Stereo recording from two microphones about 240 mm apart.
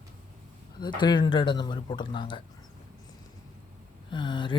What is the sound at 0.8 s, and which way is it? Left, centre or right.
Speech, centre.